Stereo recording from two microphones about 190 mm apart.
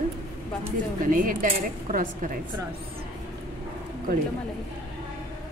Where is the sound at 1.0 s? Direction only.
50° right (ahead or behind).